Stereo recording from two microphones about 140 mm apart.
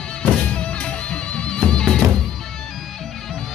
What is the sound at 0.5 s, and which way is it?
Music, 10° left (ahead or behind).